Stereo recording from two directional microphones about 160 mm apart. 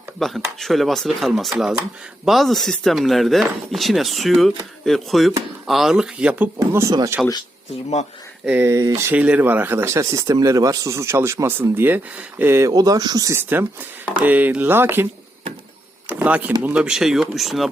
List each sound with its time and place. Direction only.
0.2 s speech: centre (ahead or behind)
6.6 s speech: 20° right (ahead or behind)
8.4 s speech: 15° right (ahead or behind)
16.0 s speech: 10° right (ahead or behind)